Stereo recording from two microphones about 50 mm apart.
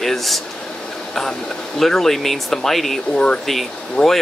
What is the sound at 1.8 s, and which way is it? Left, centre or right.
Speech, centre.